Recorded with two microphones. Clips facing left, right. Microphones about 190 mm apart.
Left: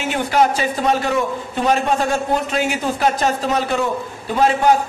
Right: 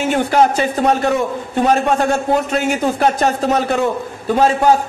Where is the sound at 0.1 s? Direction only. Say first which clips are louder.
Right 2 dB; 50° right (ahead or behind).